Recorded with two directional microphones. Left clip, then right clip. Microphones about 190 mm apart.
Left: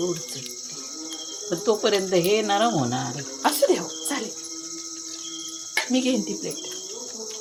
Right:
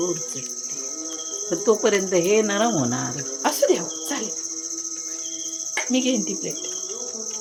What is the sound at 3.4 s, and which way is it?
Cricket, 5° left (ahead or behind).